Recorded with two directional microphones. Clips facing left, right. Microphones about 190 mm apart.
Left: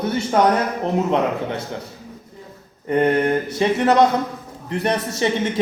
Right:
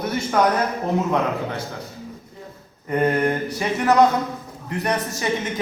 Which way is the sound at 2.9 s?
25° left (ahead or behind).